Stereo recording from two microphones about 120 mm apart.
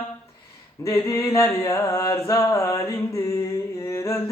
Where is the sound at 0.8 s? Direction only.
30° left (ahead or behind).